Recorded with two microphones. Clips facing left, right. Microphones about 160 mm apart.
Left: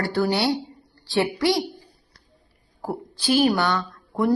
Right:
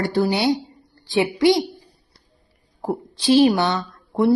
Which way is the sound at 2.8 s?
25° right (ahead or behind).